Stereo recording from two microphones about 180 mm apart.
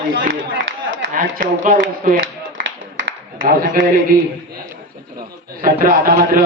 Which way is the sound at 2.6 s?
90° right.